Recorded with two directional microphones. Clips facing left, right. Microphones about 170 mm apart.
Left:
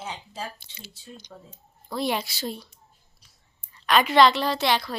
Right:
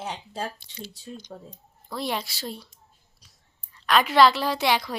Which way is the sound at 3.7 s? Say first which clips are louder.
Left 1 dB; centre (ahead or behind).